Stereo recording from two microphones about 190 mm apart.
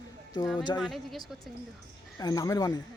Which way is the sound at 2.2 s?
20° left (ahead or behind).